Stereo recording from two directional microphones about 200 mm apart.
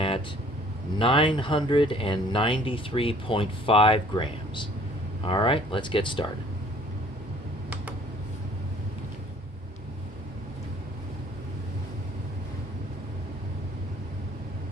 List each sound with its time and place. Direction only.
0.9 s speech: 25° left (ahead or behind)